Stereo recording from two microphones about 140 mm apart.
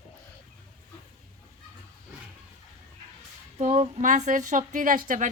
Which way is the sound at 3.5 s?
50° right (ahead or behind).